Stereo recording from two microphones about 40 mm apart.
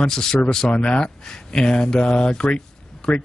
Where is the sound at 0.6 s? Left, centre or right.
Left.